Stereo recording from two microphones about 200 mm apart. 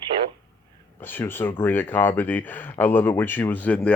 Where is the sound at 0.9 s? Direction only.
10° left (ahead or behind).